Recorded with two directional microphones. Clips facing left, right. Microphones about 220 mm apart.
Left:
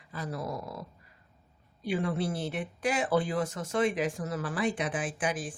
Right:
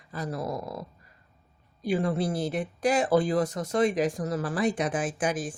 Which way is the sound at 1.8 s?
40° right (ahead or behind).